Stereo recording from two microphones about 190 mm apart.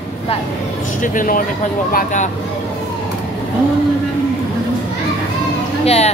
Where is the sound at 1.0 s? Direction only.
45° left (ahead or behind).